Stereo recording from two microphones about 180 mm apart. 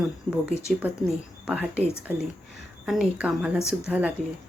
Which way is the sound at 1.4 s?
10° right (ahead or behind).